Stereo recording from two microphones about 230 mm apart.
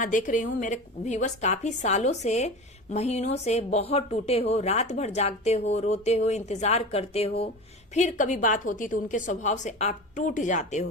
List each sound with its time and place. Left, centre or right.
0.0 s a woman's voice: left